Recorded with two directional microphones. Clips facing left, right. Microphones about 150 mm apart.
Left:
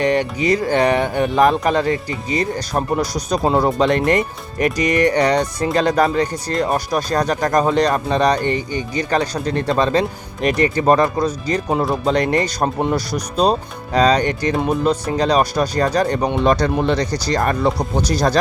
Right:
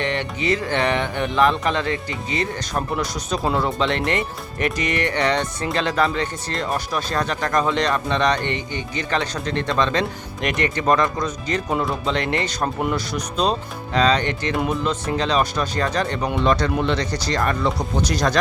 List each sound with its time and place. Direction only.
0.0 s speech: 40° left (ahead or behind)